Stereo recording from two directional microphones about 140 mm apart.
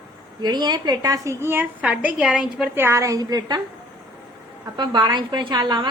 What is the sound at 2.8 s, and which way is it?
Speech, 20° right (ahead or behind).